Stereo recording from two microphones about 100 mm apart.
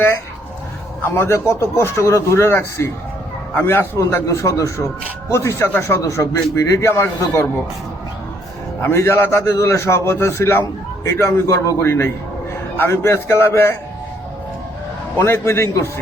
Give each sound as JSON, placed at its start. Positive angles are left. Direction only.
{"t": 1.0, "sound": "a man's voice", "side_deg": 25}
{"t": 8.8, "sound": "a man's voice", "side_deg": 25}
{"t": 15.2, "sound": "a man's voice", "side_deg": 25}